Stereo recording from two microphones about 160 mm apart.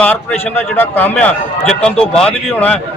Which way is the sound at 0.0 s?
10° left (ahead or behind).